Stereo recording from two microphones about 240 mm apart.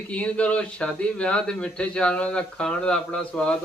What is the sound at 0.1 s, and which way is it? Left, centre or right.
Speech, centre.